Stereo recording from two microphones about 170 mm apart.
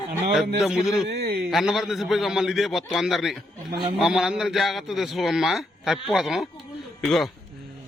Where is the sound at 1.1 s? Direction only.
70° right (ahead or behind).